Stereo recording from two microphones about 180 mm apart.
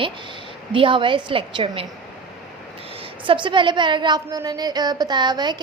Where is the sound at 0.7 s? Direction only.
30° right (ahead or behind).